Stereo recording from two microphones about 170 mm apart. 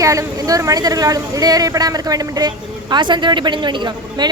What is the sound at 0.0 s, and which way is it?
Speech, 20° right (ahead or behind).